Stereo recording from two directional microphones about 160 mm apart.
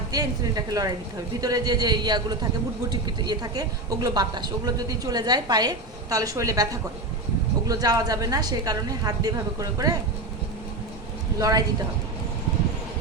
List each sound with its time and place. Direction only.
0.1 s speech: 25° right (ahead or behind)
11.3 s speech: 20° right (ahead or behind)